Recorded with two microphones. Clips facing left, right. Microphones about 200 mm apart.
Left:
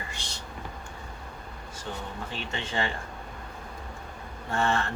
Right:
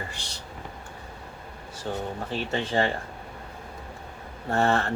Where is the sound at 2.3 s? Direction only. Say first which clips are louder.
Right 7 dB; 35° right (ahead or behind).